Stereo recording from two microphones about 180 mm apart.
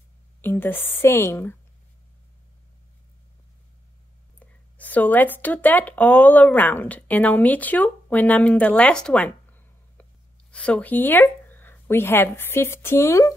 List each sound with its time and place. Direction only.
0.4 s a woman's voice: 10° left (ahead or behind)
4.4 s a woman's voice: 10° left (ahead or behind)